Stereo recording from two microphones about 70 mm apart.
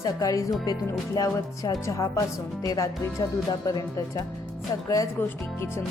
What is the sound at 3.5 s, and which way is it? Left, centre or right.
Speech, left.